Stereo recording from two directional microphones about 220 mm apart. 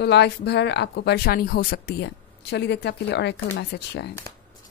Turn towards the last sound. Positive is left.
turn(degrees=50)  # may be behind; listen again after turning